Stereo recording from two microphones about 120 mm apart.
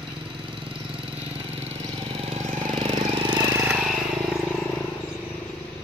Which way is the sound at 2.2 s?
65° right (ahead or behind).